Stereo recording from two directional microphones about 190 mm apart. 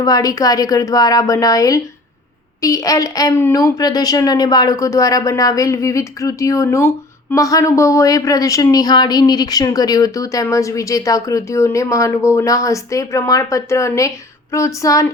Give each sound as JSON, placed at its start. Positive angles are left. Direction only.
{"t": 0.0, "sound": "a woman's voice", "side_deg": 20}